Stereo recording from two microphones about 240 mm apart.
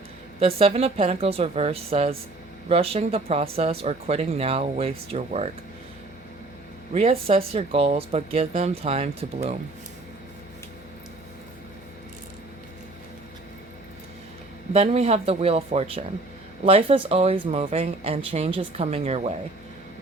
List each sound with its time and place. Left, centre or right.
0.3 s speech: right
6.9 s speech: right
14.7 s speech: right